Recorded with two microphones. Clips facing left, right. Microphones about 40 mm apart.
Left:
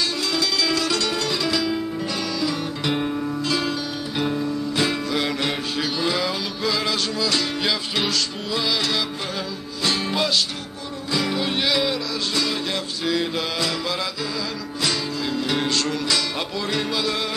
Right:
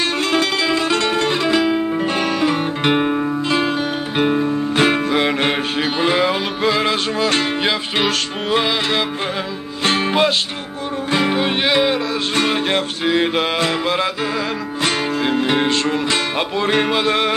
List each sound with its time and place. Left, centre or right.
0.3 s music: right